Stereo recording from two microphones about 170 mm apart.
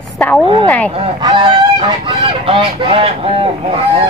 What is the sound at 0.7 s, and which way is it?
Speech, 10° left (ahead or behind).